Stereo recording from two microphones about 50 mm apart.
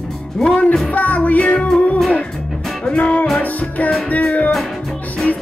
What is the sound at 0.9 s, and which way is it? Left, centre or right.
Music, left.